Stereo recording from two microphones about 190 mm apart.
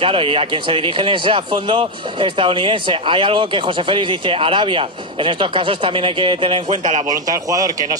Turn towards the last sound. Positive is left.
turn(degrees=-20)  # may be behind; listen again after turning